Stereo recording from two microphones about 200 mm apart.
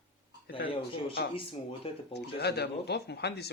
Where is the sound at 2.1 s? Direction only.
55° left (ahead or behind).